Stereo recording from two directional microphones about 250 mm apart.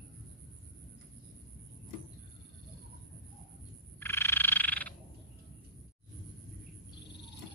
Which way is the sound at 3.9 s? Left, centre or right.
Centre.